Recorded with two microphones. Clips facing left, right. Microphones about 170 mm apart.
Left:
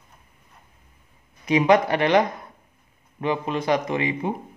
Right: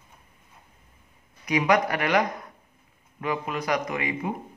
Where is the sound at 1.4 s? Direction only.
25° left (ahead or behind).